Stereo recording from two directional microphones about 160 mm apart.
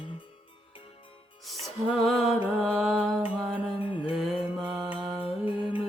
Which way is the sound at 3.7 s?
35° left (ahead or behind).